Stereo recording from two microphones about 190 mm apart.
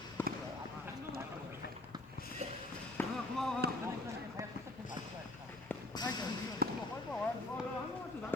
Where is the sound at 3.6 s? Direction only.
60° right (ahead or behind).